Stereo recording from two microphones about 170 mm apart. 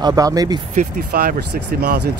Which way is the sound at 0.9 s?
65° right (ahead or behind).